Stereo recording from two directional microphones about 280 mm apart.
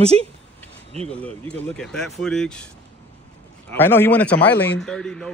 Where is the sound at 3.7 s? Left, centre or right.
Centre.